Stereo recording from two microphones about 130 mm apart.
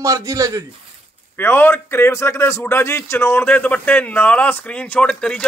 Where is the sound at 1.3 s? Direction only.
15° left (ahead or behind).